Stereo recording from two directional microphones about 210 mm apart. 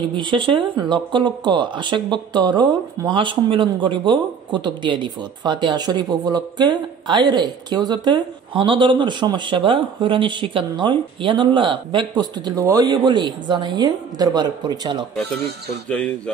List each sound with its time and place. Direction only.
0.1 s speech: 25° right (ahead or behind)
15.9 s speech: 5° left (ahead or behind)